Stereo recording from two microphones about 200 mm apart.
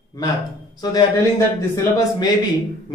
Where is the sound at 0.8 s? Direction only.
20° left (ahead or behind).